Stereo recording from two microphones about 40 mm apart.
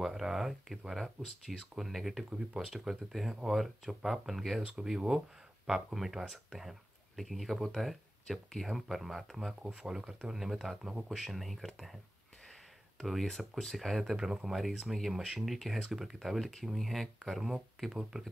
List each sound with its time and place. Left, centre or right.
0.0 s speech: centre
2.2 s speech: centre
9.6 s speech: right; by 12.0 s centre
13.0 s speech: centre
14.1 s speech: centre
14.4 s speech: centre
18.1 s speech: right